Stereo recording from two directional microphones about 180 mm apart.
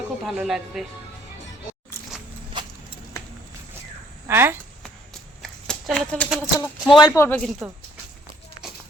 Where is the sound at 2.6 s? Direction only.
25° right (ahead or behind).